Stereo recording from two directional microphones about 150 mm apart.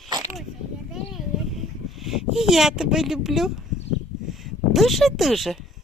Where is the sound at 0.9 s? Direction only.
Centre (ahead or behind).